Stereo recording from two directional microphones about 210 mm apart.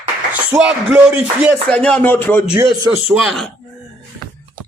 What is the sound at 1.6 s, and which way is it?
Speech, 5° left (ahead or behind).